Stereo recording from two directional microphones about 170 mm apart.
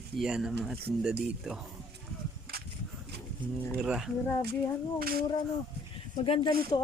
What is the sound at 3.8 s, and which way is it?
Speech, 5° right (ahead or behind).